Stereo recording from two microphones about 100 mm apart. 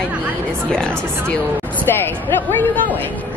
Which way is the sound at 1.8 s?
20° left (ahead or behind).